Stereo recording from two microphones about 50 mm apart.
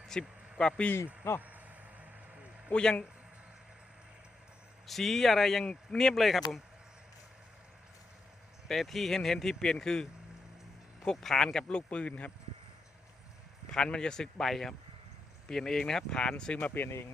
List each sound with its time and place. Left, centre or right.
0.1 s speech: centre
0.6 s a man's voice: left
1.4 s vehicle: right
2.6 s a man's voice: left
4.9 s speech: centre
6.2 s speech: centre
8.6 s speech: centre
11.4 s a man's voice: left
13.7 s speech: centre
16.6 s speech: left